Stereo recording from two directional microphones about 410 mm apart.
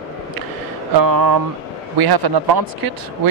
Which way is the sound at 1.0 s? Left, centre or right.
Right.